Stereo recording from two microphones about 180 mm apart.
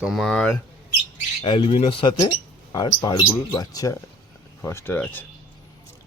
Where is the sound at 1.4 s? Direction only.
30° left (ahead or behind); by 5.2 s 10° left (ahead or behind).